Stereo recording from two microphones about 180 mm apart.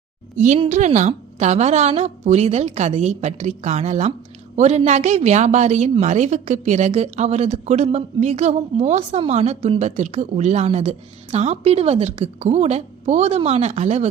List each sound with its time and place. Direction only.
0.3 s a woman's voice: 45° right (ahead or behind)